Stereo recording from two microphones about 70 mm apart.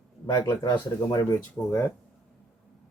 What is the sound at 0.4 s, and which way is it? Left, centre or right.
Speech, left.